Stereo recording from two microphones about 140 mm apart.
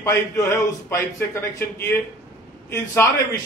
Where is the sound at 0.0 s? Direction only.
20° left (ahead or behind).